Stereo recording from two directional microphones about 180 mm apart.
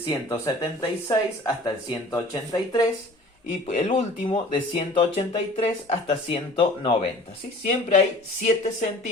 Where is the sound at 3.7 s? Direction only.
35° left (ahead or behind).